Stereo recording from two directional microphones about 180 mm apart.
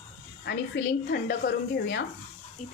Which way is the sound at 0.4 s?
60° left (ahead or behind).